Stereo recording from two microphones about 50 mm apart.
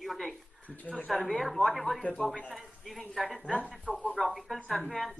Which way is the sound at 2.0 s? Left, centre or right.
Left.